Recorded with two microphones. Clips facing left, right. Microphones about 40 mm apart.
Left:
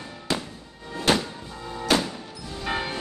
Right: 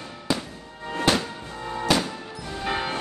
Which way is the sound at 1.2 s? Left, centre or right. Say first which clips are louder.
Right 2 dB; right.